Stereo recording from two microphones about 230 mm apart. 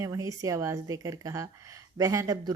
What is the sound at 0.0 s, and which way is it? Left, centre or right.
A woman's voice, centre.